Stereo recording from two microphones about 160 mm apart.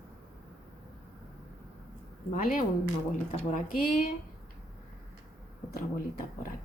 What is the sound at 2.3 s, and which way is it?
Speech, 55° left (ahead or behind).